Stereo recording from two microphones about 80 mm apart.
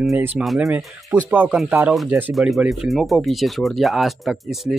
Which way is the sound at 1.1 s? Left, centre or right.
Right.